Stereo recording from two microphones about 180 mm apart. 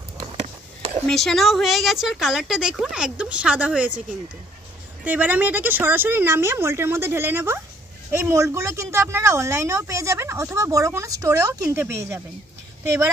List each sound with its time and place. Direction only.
1.0 s speech: centre (ahead or behind)
5.0 s a woman's voice: 10° right (ahead or behind)